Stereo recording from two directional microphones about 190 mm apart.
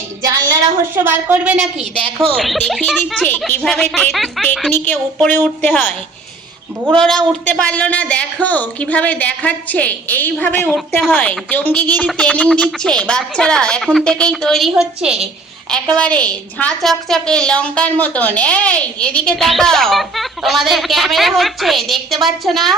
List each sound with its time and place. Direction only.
0.3 s a woman's voice: 15° right (ahead or behind)
2.2 s a woman's voice: 5° left (ahead or behind)
6.9 s a woman's voice: 5° left (ahead or behind)